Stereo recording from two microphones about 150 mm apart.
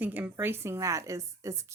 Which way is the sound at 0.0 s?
15° right (ahead or behind).